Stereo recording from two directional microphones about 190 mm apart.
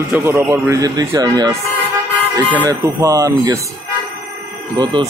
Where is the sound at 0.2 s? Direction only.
15° right (ahead or behind).